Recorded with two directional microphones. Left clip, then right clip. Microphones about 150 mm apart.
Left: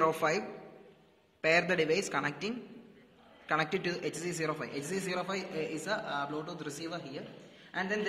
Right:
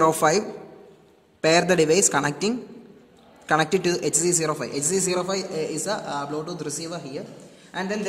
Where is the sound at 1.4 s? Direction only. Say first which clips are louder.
Right 9 dB; 80° right.